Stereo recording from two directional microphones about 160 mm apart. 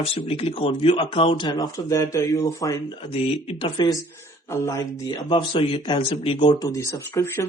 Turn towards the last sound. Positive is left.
turn(degrees=15)  # may be behind; listen again after turning